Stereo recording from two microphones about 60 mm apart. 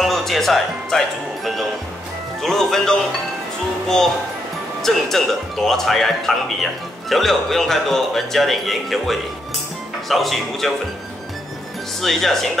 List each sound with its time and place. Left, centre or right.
0.0 s speech: centre
4.8 s speech: centre
12.0 s speech: centre